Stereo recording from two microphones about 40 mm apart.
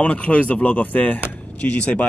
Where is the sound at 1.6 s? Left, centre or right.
Left.